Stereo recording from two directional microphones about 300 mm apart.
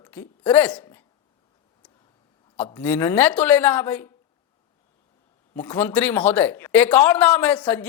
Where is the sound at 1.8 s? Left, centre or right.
Centre.